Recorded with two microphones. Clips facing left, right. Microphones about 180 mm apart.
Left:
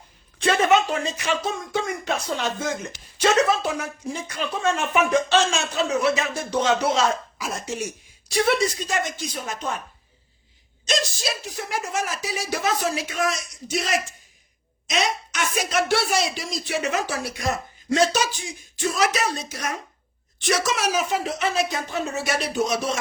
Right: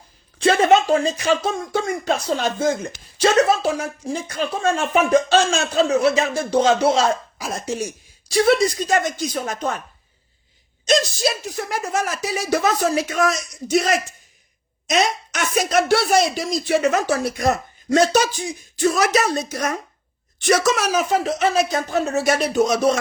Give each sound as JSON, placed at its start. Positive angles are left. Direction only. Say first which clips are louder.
{"t": 0.3, "sound": "speech", "louder": "right 4 dB", "side_deg": -35}
{"t": 5.7, "sound": "speech", "louder": "right 6 dB", "side_deg": -30}
{"t": 11.7, "sound": "speech", "louder": "right 3 dB", "side_deg": -40}